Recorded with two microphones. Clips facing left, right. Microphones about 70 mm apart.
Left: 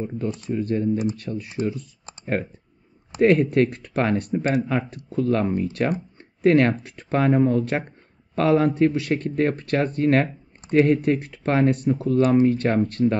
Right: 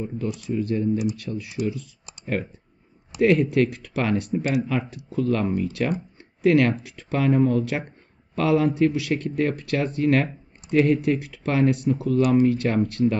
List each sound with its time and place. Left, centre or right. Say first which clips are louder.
0.2 s speech: even; left